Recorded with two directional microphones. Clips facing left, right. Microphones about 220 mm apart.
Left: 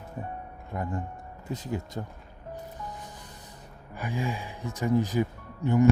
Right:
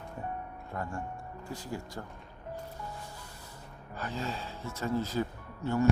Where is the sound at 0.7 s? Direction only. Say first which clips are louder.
Left 5 dB; 20° left (ahead or behind).